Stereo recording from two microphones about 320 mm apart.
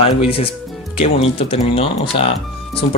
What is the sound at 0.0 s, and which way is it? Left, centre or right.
Speech, centre.